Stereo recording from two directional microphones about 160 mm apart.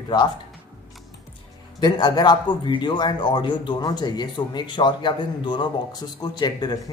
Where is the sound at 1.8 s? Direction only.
30° left (ahead or behind).